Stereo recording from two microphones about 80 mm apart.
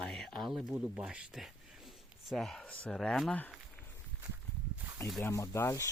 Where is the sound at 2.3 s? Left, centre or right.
Centre.